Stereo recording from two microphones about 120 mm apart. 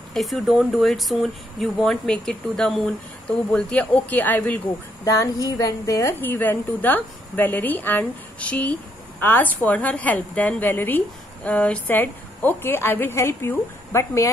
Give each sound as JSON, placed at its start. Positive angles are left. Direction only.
{"t": 0.1, "sound": "a woman's voice", "side_deg": 0}
{"t": 5.0, "sound": "a woman's voice", "side_deg": 25}
{"t": 6.2, "sound": "a woman's voice", "side_deg": 15}